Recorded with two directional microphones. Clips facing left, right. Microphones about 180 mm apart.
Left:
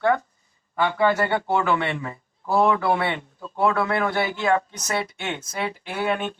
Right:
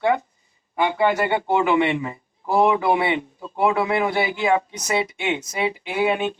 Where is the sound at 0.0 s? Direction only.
15° right (ahead or behind).